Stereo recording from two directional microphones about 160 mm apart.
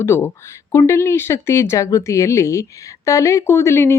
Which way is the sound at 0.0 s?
15° left (ahead or behind).